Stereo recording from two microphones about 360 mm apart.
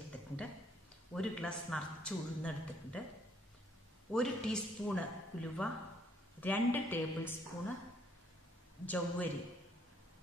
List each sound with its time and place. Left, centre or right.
1.1 s speech: centre
4.1 s speech: centre
8.8 s speech: centre